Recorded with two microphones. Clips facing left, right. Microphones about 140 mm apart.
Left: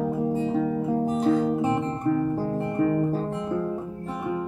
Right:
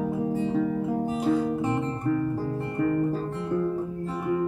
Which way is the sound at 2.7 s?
15° left (ahead or behind).